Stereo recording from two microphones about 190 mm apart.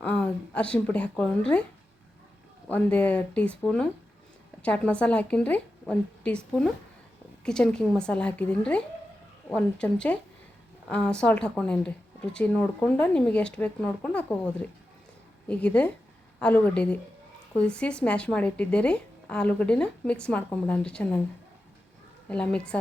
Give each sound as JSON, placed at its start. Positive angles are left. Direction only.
{"t": 0.0, "sound": "speech", "side_deg": 5}
{"t": 2.6, "sound": "a woman's voice", "side_deg": 10}
{"t": 22.3, "sound": "a woman's voice", "side_deg": 5}